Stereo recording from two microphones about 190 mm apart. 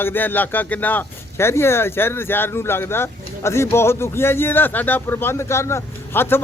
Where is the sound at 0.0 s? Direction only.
10° left (ahead or behind).